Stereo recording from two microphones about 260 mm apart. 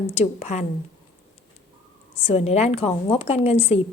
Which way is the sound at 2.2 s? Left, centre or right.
Left.